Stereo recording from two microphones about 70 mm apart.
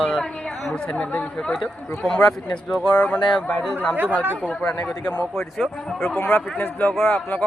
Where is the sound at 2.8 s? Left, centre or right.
Centre.